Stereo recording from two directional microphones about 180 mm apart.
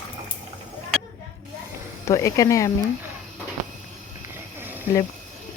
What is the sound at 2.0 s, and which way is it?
Speech, 15° left (ahead or behind).